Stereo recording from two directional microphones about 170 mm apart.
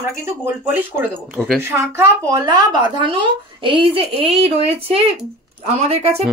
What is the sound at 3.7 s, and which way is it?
Speech, 30° right (ahead or behind).